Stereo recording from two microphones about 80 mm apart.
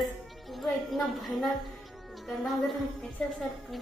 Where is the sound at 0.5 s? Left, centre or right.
Centre.